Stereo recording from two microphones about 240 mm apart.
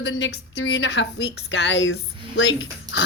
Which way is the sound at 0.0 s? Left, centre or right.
Left.